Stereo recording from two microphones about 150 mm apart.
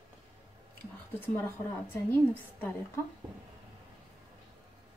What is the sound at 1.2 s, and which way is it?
Speech, 15° left (ahead or behind).